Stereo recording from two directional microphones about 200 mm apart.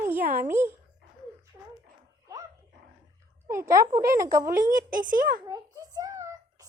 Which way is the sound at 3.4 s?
15° right (ahead or behind).